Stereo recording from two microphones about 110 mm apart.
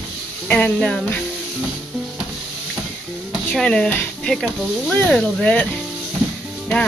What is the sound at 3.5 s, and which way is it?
Speech, 5° left (ahead or behind).